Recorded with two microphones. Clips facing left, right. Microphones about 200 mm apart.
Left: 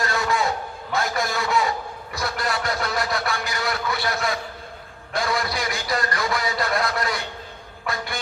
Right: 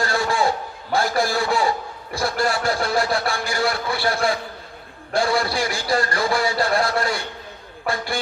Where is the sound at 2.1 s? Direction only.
30° right (ahead or behind).